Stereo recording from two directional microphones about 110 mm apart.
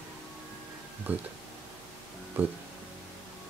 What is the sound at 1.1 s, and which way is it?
Speech, 15° right (ahead or behind).